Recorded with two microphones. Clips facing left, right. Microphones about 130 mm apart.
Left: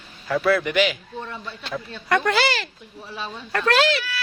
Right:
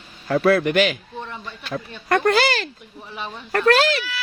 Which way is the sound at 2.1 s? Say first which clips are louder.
Right 3 dB; 45° right (ahead or behind).